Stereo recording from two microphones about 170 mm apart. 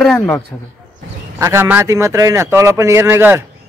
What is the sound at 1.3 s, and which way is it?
A man's voice, 15° right (ahead or behind).